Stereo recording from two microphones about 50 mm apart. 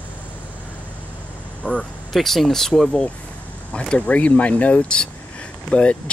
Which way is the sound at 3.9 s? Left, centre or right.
Left.